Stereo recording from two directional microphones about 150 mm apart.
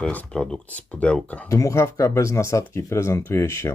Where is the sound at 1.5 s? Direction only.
20° left (ahead or behind).